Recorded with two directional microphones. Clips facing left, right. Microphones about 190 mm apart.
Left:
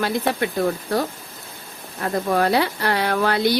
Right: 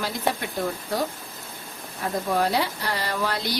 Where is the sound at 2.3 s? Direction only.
65° left (ahead or behind).